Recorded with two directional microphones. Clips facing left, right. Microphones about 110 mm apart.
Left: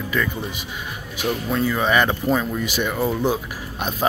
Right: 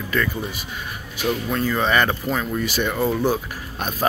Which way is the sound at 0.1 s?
15° left (ahead or behind).